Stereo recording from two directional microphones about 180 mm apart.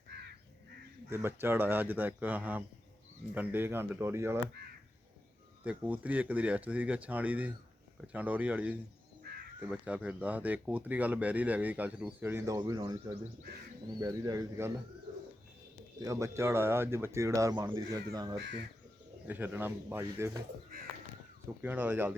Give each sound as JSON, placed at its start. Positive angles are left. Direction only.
{"t": 1.1, "sound": "speech", "side_deg": -10}
{"t": 4.6, "sound": "speech", "side_deg": -65}
{"t": 5.6, "sound": "speech", "side_deg": -10}
{"t": 16.0, "sound": "speech", "side_deg": -20}
{"t": 18.3, "sound": "speech", "side_deg": -80}
{"t": 19.3, "sound": "speech", "side_deg": -10}
{"t": 21.6, "sound": "speech", "side_deg": -10}